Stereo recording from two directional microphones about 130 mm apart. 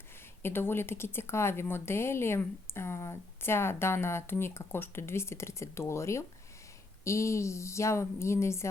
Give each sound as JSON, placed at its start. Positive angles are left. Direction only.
{"t": 0.4, "sound": "speech", "side_deg": 15}